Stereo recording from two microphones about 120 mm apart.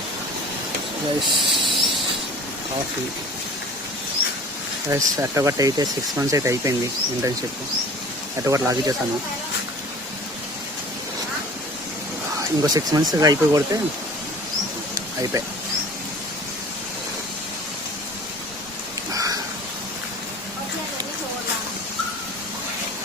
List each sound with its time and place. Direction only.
1.2 s speech: centre (ahead or behind)
4.9 s speech: 25° right (ahead or behind)
8.4 s speech: 25° right (ahead or behind)
12.4 s speech: 30° right (ahead or behind)
14.9 s a sound: 30° right (ahead or behind)
19.1 s a sound: 30° right (ahead or behind)